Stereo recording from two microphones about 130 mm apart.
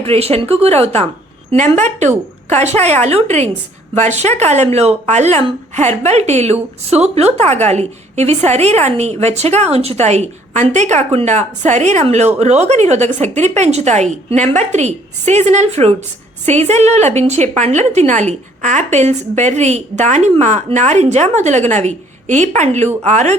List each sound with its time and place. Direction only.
0.0 s speech: 50° right (ahead or behind)
1.5 s a woman's voice: 65° right (ahead or behind)